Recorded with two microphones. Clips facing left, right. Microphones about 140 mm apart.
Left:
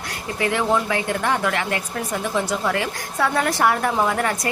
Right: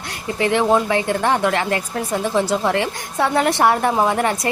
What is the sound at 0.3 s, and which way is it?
A woman's voice, 25° right (ahead or behind).